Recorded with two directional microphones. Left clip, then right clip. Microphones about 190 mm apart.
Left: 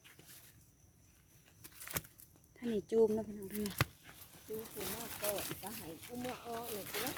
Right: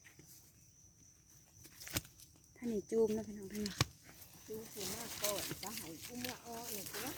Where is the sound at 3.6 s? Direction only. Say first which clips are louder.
Left 1 dB; 20° left (ahead or behind).